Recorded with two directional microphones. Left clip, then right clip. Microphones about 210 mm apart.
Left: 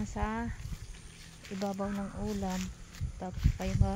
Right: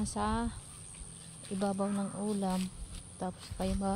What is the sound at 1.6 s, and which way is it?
Music, 10° right (ahead or behind).